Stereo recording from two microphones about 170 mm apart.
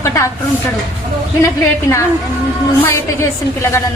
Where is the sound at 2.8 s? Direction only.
15° left (ahead or behind).